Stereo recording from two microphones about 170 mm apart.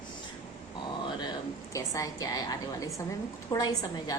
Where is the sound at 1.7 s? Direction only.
20° left (ahead or behind).